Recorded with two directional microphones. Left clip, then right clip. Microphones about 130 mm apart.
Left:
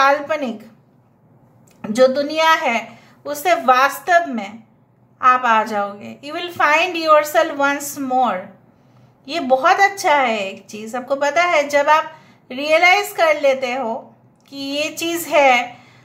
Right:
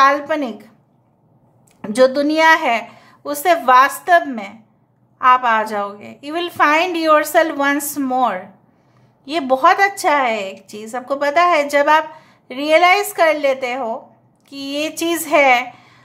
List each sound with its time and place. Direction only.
0.0 s a woman's voice: 35° right (ahead or behind)
1.8 s a woman's voice: 40° right (ahead or behind)